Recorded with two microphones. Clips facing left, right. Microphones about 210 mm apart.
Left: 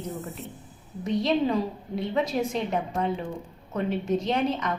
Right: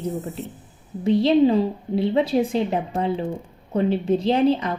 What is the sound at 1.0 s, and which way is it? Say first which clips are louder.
A woman's voice: right 8 dB; 30° right (ahead or behind).